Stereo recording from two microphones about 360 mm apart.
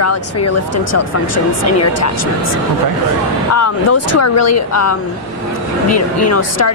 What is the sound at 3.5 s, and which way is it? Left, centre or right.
A woman's voice, left.